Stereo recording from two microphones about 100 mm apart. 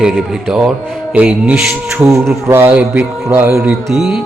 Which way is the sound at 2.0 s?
25° right (ahead or behind).